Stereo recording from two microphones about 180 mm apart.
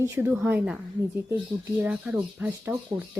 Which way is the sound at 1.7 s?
5° right (ahead or behind).